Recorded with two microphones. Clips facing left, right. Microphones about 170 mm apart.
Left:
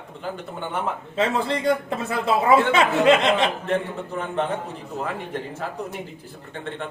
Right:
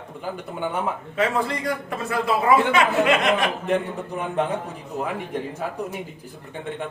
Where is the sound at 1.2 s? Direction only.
25° left (ahead or behind).